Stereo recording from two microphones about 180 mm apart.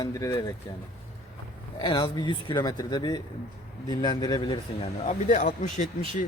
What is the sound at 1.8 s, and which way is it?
Speech, 25° left (ahead or behind).